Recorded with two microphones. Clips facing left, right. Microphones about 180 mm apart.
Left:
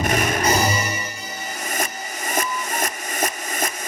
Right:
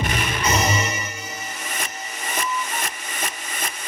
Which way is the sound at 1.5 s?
40° left (ahead or behind).